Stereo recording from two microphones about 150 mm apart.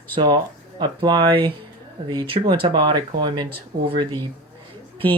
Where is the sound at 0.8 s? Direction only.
30° right (ahead or behind).